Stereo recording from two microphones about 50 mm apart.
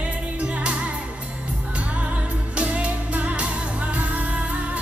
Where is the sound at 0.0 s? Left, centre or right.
Right.